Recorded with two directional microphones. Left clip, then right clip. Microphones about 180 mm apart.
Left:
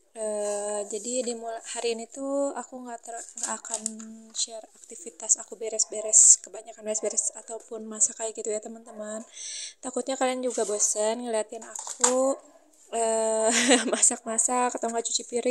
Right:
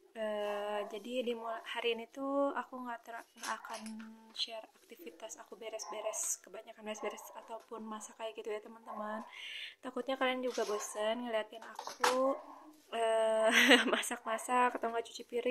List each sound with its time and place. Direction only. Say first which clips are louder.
0.2 s speech: left 8 dB; 35° left (ahead or behind)
12.9 s speech: left 6 dB; 35° left (ahead or behind)